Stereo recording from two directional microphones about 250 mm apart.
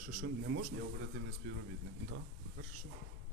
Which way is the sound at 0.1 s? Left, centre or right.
Right.